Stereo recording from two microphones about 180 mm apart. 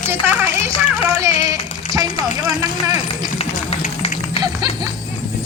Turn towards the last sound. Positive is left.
turn(degrees=-25)  # may be behind; listen again after turning